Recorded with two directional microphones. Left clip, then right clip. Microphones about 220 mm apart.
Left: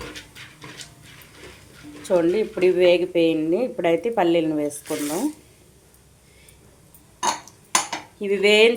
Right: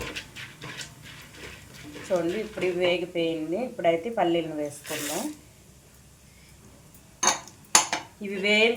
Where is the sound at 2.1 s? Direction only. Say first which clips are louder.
Left 7 dB; 50° left (ahead or behind).